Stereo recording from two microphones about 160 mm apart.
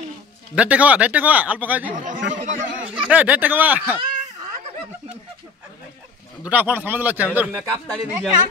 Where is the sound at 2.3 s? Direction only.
50° right (ahead or behind).